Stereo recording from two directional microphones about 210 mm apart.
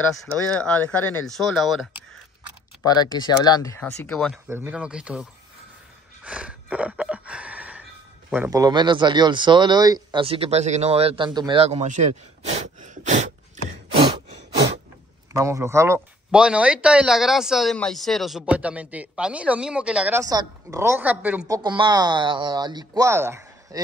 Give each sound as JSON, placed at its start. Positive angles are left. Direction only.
{"t": 0.1, "sound": "speech", "side_deg": 0}
{"t": 2.8, "sound": "speech", "side_deg": 20}
{"t": 4.5, "sound": "speech", "side_deg": -10}
{"t": 6.2, "sound": "a sound", "side_deg": -5}
{"t": 8.4, "sound": "speech", "side_deg": -15}
{"t": 15.3, "sound": "a woman's voice", "side_deg": -15}
{"t": 21.5, "sound": "speech", "side_deg": -20}